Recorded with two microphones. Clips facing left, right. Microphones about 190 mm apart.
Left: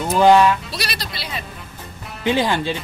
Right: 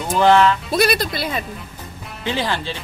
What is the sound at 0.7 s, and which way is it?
Speech, 50° right (ahead or behind).